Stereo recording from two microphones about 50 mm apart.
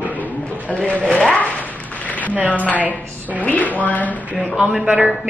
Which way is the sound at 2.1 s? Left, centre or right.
Left.